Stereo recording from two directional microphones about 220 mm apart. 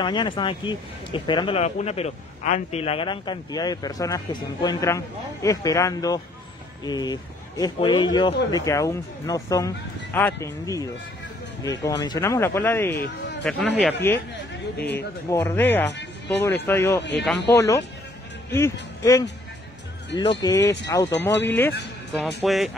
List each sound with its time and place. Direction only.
0.0 s speech: 20° left (ahead or behind); by 13.9 s 5° left (ahead or behind)
14.8 s speech: 50° left (ahead or behind)
15.2 s speech: 10° left (ahead or behind)
15.9 s speech: 50° left (ahead or behind)
16.4 s speech: 10° left (ahead or behind)
22.4 s speech: centre (ahead or behind)